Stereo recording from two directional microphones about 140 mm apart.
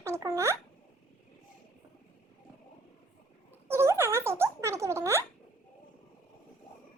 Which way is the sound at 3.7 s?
20° right (ahead or behind).